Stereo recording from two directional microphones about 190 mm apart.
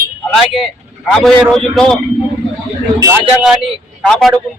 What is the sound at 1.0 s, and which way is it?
Speech, 5° left (ahead or behind).